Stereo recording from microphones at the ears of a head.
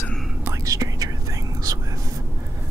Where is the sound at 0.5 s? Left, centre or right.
Right.